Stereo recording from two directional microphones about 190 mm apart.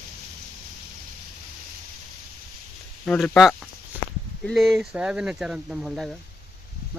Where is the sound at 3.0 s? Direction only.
5° left (ahead or behind).